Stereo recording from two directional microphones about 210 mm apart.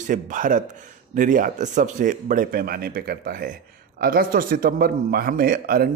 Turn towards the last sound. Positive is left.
turn(degrees=-45)  # may be behind; listen again after turning